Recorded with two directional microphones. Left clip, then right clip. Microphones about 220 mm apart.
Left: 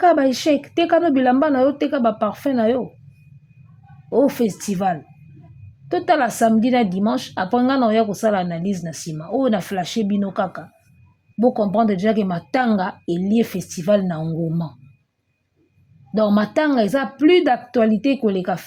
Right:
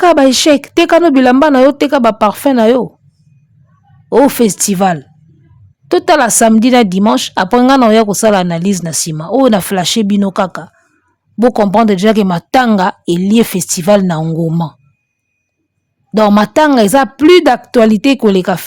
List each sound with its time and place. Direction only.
0.0 s a woman's voice: 35° right (ahead or behind)
4.1 s a woman's voice: 40° right (ahead or behind)
16.1 s a woman's voice: 35° right (ahead or behind)